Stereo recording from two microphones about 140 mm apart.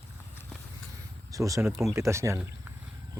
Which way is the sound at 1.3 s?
25° right (ahead or behind).